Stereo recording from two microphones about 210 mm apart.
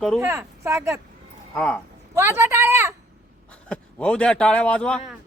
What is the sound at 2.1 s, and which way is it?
Speech, 10° right (ahead or behind).